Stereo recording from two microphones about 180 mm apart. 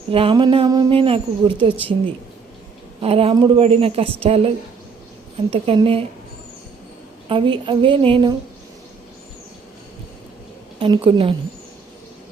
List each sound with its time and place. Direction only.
0.1 s speech: 30° right (ahead or behind)
3.0 s a woman's voice: 35° right (ahead or behind)
7.3 s speech: 30° right (ahead or behind)
10.8 s speech: 25° right (ahead or behind)